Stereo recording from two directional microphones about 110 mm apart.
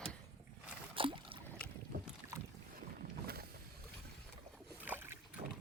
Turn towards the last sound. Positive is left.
turn(degrees=-20)  # may be behind; listen again after turning